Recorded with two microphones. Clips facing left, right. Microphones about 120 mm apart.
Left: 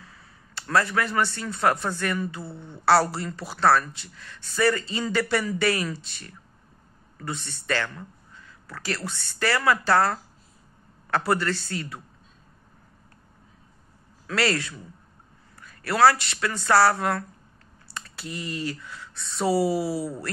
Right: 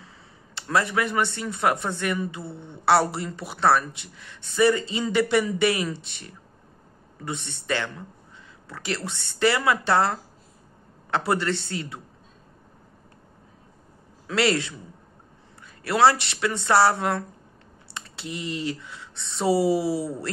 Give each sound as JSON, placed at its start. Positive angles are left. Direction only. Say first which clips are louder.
{"t": 0.0, "sound": "speech", "louder": "right 1 dB", "side_deg": -25}
{"t": 14.2, "sound": "speech", "louder": "right 2 dB", "side_deg": -20}